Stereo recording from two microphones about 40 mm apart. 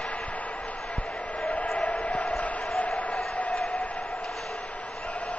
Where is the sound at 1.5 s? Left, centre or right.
Left.